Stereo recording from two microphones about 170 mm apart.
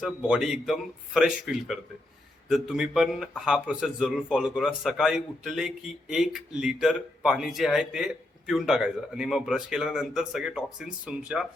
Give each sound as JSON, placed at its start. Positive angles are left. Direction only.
{"t": 0.0, "sound": "speech", "side_deg": -5}